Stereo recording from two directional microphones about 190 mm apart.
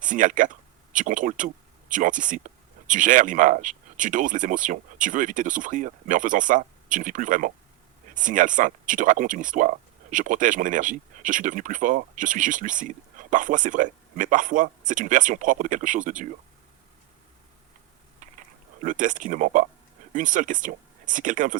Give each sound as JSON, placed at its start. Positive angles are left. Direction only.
{"t": 0.0, "sound": "speech", "side_deg": -45}
{"t": 18.2, "sound": "a sound", "side_deg": -40}
{"t": 20.1, "sound": "speech", "side_deg": -40}